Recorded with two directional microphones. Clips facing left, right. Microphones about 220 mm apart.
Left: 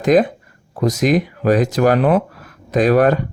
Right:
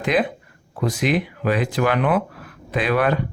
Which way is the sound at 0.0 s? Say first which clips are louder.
Left 7 dB; 45° left (ahead or behind).